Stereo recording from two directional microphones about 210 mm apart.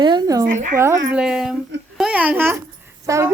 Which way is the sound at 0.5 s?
35° right (ahead or behind).